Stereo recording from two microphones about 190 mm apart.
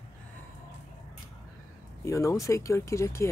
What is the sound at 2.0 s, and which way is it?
Speech, 15° left (ahead or behind).